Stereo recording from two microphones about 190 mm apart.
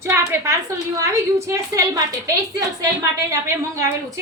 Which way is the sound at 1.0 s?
15° right (ahead or behind).